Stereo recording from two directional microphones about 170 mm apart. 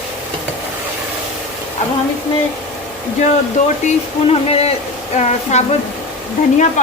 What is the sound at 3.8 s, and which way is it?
Speech, 35° left (ahead or behind).